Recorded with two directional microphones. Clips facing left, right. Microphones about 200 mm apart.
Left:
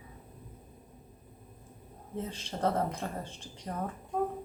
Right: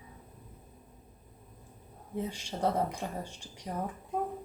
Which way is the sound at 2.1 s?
10° right (ahead or behind).